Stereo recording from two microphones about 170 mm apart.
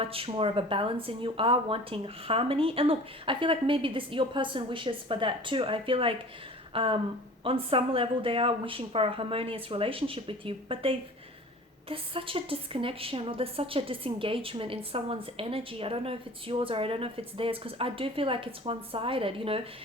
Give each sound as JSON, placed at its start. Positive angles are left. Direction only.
{"t": 0.0, "sound": "a woman's voice", "side_deg": -35}